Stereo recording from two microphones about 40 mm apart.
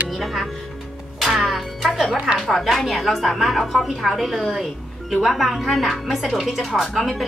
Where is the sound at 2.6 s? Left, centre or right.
Centre.